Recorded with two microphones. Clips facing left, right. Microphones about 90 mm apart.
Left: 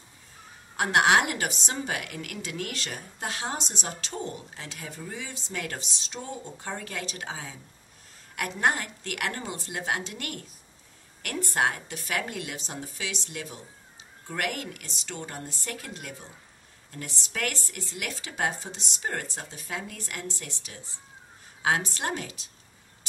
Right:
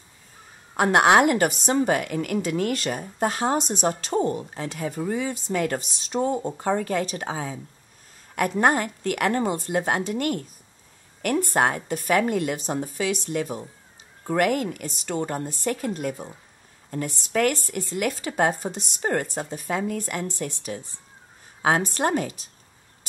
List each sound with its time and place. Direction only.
0.7 s speech: 50° right (ahead or behind)
11.3 s speech: 45° right (ahead or behind)
15.6 s speech: 40° right (ahead or behind)